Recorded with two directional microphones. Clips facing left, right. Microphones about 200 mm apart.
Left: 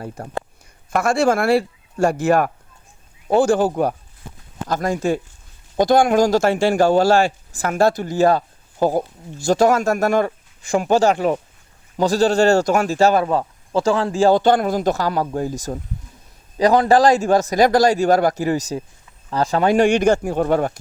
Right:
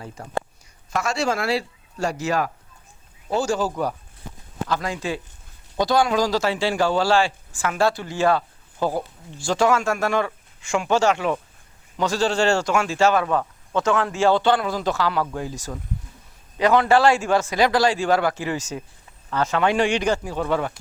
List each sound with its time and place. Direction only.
0.9 s a man's voice: 55° left (ahead or behind)
4.7 s a man's voice: 45° left (ahead or behind)